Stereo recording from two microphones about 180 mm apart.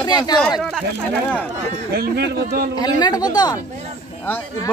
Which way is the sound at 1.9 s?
60° right (ahead or behind).